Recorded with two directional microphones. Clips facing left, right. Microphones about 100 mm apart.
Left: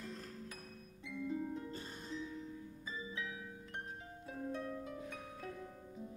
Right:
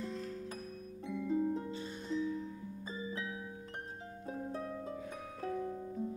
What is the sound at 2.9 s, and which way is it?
Music, 35° right (ahead or behind).